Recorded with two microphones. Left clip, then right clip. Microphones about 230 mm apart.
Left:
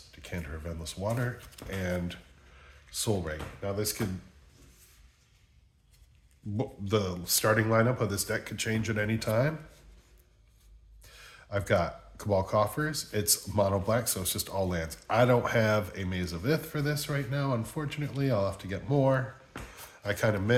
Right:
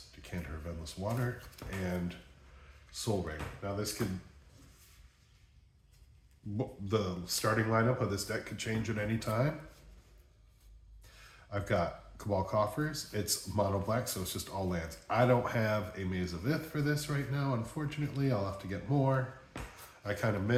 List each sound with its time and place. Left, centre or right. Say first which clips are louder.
0.2 s speech: left 5 dB; left
2.9 s speech: left 4 dB; left
6.6 s speech: left 4 dB; left
11.0 s speech: left 6 dB; left